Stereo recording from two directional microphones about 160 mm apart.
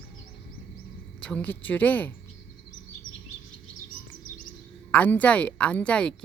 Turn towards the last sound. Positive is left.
turn(degrees=5)  # may be behind; listen again after turning